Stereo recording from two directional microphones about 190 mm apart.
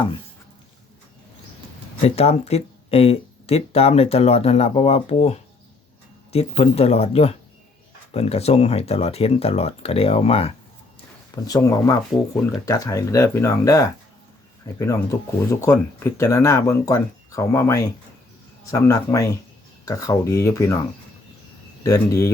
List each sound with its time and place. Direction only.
2.0 s speech: 35° left (ahead or behind)
11.4 s speech: 20° left (ahead or behind)
21.8 s speech: 15° left (ahead or behind)